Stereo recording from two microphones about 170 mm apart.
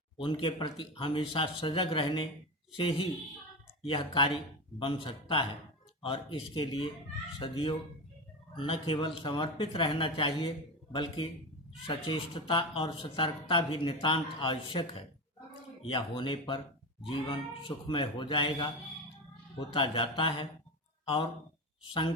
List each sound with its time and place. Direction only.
0.2 s speech: 30° left (ahead or behind)